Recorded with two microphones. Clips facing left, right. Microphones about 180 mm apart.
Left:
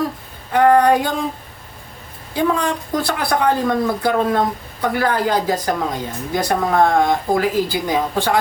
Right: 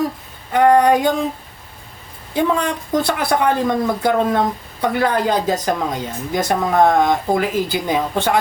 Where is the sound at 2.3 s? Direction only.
20° right (ahead or behind).